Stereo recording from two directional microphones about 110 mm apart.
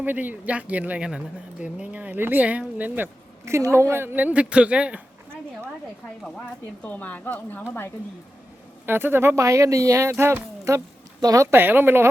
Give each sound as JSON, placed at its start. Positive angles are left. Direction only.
{"t": 0.0, "sound": "speech", "side_deg": -15}
{"t": 6.8, "sound": "speech", "side_deg": 15}
{"t": 8.9, "sound": "speech", "side_deg": -20}
{"t": 11.2, "sound": "speech", "side_deg": -35}
{"t": 11.5, "sound": "speech", "side_deg": -20}